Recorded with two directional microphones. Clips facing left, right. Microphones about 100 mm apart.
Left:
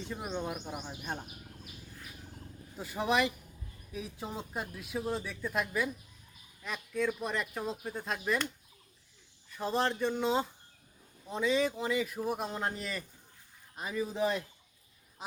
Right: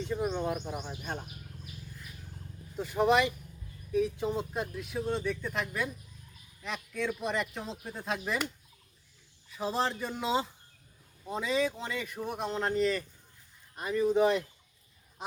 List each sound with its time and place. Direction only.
0.0 s speech: 5° left (ahead or behind)
2.7 s speech: centre (ahead or behind)
9.5 s speech: 5° right (ahead or behind)